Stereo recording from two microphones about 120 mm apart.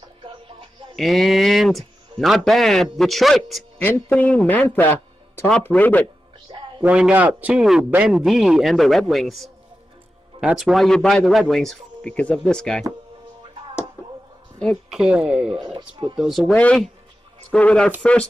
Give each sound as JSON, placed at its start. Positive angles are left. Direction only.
{"t": 0.9, "sound": "speech", "side_deg": 0}
{"t": 3.7, "sound": "a man's voice", "side_deg": 15}
{"t": 6.8, "sound": "speech", "side_deg": -10}
{"t": 14.9, "sound": "speech", "side_deg": -5}
{"t": 15.6, "sound": "speech", "side_deg": -40}
{"t": 16.2, "sound": "a man's voice", "side_deg": 0}